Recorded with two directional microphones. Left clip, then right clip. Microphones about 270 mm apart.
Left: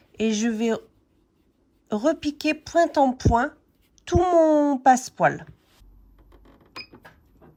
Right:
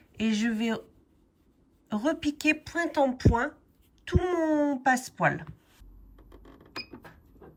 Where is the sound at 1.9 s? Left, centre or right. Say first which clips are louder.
Left 5 dB; centre.